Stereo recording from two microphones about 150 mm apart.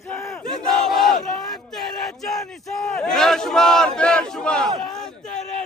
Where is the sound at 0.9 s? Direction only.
Centre (ahead or behind).